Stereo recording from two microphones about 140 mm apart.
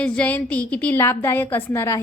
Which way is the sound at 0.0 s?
10° left (ahead or behind).